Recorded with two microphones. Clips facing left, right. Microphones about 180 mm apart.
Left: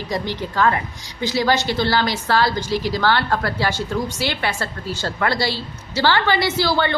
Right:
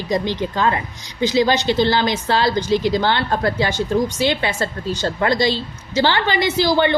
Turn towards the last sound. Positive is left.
turn(degrees=-15)  # may be behind; listen again after turning